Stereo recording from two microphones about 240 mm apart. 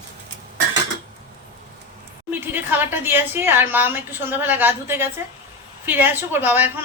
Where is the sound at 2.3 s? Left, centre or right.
Centre.